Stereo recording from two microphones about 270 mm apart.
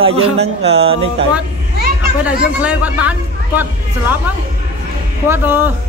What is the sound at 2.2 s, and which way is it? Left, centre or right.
A man's voice, centre.